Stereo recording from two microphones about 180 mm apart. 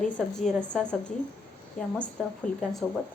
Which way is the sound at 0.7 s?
5° left (ahead or behind).